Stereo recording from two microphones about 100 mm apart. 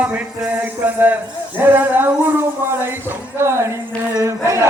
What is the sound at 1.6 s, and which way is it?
Speech, 20° right (ahead or behind).